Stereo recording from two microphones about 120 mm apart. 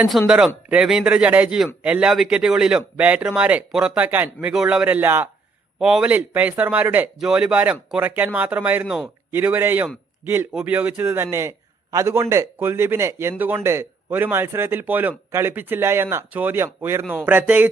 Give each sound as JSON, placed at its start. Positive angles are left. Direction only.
{"t": 0.1, "sound": "a man's voice", "side_deg": -5}
{"t": 5.8, "sound": "a man's voice", "side_deg": -5}